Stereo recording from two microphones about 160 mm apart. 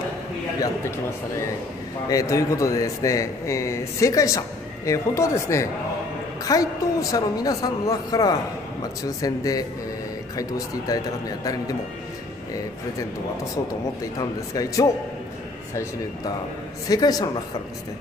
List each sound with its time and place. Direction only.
2.0 s a man's voice: 20° left (ahead or behind)
10.9 s a man's voice: 20° left (ahead or behind)
14.1 s a man's voice: 20° left (ahead or behind)